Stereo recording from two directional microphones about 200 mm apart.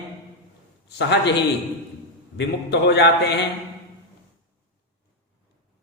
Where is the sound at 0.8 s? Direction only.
60° left (ahead or behind).